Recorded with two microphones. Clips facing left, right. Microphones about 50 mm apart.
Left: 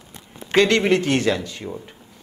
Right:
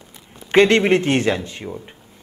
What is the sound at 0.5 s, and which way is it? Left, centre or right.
A man's voice, right.